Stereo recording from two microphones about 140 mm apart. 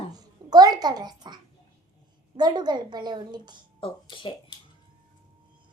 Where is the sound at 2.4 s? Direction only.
30° right (ahead or behind).